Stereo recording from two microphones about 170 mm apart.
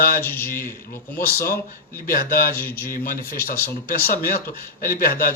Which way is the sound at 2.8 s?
55° left (ahead or behind).